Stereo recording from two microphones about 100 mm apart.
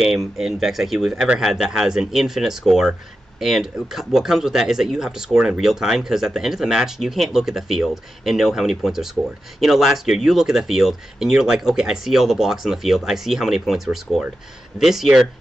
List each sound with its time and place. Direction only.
0.0 s speech: 5° right (ahead or behind)